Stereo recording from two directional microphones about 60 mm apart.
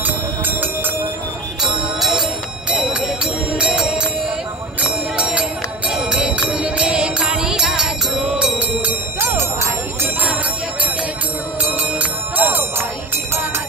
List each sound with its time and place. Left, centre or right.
0.0 s music: right
1.6 s music: centre
2.7 s music: centre
5.1 s music: centre
8.1 s music: right
9.2 s music: right
9.9 s bell: right
11.7 s music: right